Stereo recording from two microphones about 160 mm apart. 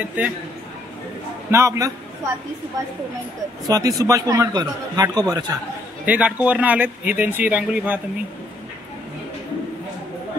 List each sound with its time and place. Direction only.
0.2 s speech: 10° right (ahead or behind)
1.5 s a man's voice: 20° right (ahead or behind)
3.6 s a man's voice: 20° right (ahead or behind)
6.0 s speech: 10° right (ahead or behind)